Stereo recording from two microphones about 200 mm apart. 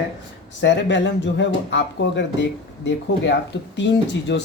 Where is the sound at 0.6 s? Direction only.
65° left (ahead or behind).